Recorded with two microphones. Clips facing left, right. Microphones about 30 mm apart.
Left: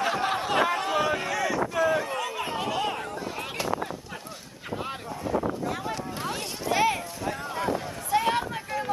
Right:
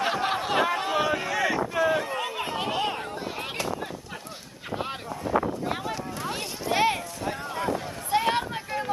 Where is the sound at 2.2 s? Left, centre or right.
Right.